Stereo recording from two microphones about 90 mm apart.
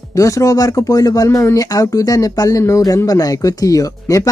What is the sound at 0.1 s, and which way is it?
Speech, 35° left (ahead or behind).